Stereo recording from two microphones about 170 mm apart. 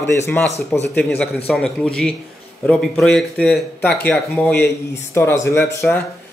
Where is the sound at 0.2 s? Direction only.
10° left (ahead or behind).